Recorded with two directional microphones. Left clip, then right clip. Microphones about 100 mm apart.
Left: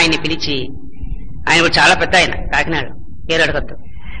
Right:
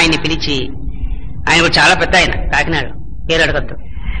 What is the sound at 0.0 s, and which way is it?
A man's voice, 40° left (ahead or behind).